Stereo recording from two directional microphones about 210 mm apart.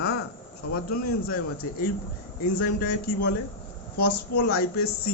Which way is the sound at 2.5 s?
50° left (ahead or behind).